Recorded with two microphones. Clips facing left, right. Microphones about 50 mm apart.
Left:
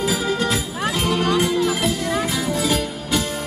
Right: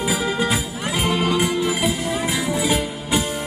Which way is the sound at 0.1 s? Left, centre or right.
Centre.